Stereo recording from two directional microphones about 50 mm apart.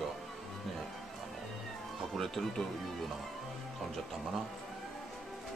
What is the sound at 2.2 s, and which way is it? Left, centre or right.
Speech, centre.